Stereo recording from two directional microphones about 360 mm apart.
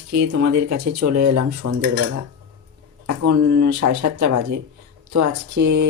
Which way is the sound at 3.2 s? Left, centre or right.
Right.